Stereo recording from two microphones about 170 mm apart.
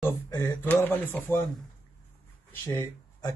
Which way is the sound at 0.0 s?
15° left (ahead or behind).